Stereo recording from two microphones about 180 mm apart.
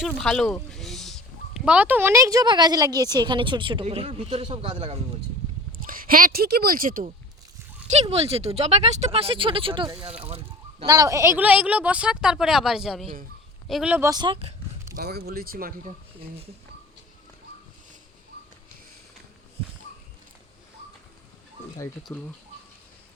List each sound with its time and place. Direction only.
0.0 s speech: 5° left (ahead or behind); by 4.9 s 30° right (ahead or behind)
5.8 s speech: 50° right (ahead or behind)
8.1 s a woman's voice: 35° right (ahead or behind); by 14.1 s 10° right (ahead or behind)
14.1 s a sound: 25° right (ahead or behind)
14.9 s speech: 60° right (ahead or behind)
22.1 s speech: 10° left (ahead or behind)